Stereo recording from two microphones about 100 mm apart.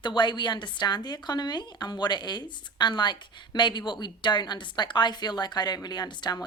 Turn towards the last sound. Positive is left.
turn(degrees=45)  # may be behind; listen again after turning